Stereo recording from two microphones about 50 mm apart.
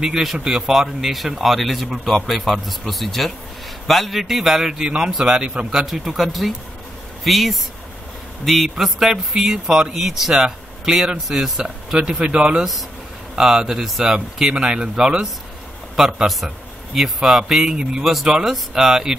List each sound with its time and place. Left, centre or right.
0.0 s speech: centre
11.6 s speech: centre